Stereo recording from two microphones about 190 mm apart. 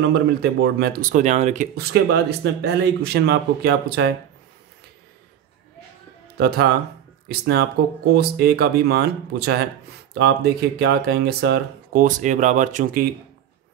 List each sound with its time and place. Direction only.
0.0 s speech: 60° right (ahead or behind); by 1.7 s 40° right (ahead or behind)
1.8 s speech: 55° right (ahead or behind)
6.3 s speech: 55° right (ahead or behind)